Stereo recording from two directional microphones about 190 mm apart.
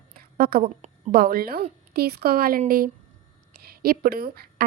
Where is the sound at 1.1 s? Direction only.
50° right (ahead or behind).